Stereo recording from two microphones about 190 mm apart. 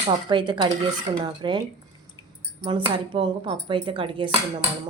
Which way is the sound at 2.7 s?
25° right (ahead or behind).